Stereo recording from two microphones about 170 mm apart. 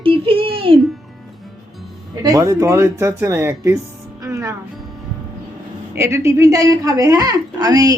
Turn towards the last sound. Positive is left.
turn(degrees=-20)  # may be behind; listen again after turning